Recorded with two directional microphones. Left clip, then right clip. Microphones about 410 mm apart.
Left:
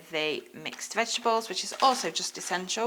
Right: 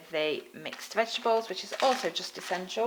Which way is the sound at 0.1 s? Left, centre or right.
Centre.